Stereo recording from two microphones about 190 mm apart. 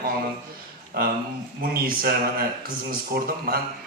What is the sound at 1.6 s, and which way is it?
A man's voice, 50° right (ahead or behind).